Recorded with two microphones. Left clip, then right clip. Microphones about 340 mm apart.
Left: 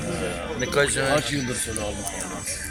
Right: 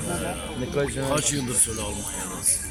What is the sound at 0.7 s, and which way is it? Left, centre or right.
Speech, left.